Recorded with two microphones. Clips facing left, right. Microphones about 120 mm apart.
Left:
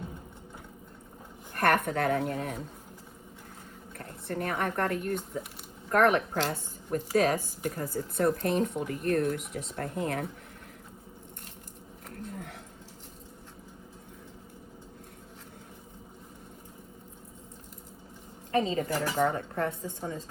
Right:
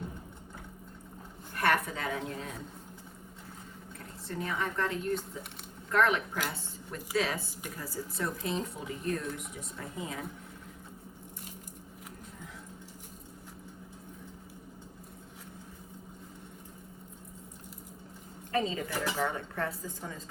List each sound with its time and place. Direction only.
1.5 s speech: 55° left (ahead or behind)
3.9 s speech: 55° left (ahead or behind)
12.1 s a sound: 70° left (ahead or behind)
18.5 s a woman's voice: 35° left (ahead or behind)